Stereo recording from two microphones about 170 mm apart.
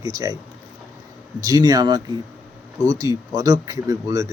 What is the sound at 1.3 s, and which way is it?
Speech, 20° right (ahead or behind).